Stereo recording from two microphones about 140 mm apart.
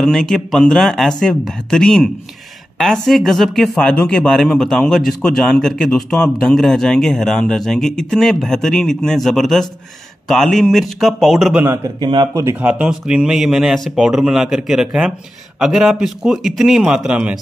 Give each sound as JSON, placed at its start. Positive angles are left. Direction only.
{"t": 0.0, "sound": "speech", "side_deg": 5}
{"t": 12.0, "sound": "speech", "side_deg": -30}
{"t": 12.4, "sound": "speech", "side_deg": -10}